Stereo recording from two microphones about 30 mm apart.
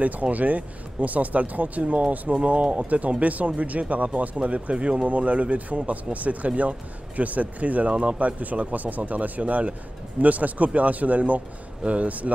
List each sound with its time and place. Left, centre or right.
0.0 s speech: right
4.7 s speech: right
5.0 s speech: right
7.9 s speech: right
8.4 s speech: right